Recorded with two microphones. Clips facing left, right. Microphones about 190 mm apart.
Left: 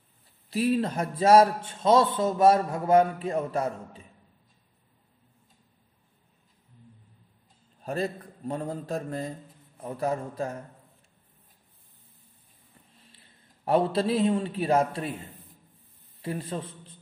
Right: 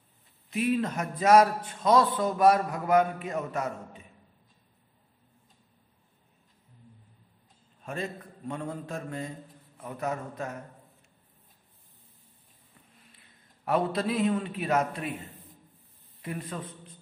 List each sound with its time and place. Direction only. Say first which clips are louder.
0.5 s a man's voice: left 2 dB; 35° left (ahead or behind)
7.8 s a man's voice: left 5 dB; 35° left (ahead or behind)
13.7 s a man's voice: left 4 dB; 30° left (ahead or behind)
16.2 s a man's voice: left 4 dB; 30° left (ahead or behind)